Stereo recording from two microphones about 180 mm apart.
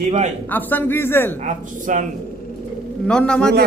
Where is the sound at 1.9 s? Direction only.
45° right (ahead or behind).